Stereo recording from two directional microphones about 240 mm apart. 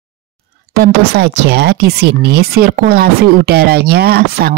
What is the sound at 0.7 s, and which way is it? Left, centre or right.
Speech, right.